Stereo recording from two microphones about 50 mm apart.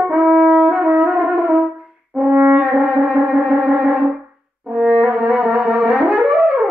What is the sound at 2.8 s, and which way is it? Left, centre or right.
Music, right.